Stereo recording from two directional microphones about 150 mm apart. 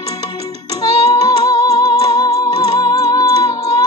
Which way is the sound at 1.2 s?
25° left (ahead or behind).